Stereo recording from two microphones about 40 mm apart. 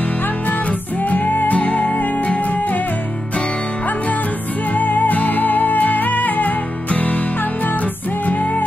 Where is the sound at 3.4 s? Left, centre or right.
Left.